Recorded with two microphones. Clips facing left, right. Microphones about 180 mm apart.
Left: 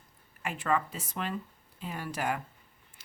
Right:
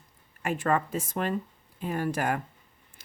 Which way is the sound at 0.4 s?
45° right (ahead or behind).